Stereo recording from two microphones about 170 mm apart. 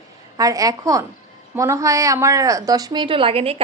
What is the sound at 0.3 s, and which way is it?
A woman's voice, 20° right (ahead or behind).